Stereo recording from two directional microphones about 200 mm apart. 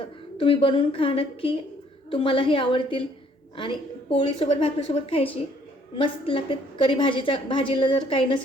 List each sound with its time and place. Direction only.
0.0 s a woman's voice: 25° left (ahead or behind)